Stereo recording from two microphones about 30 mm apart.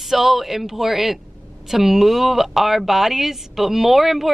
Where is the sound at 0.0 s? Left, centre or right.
Centre.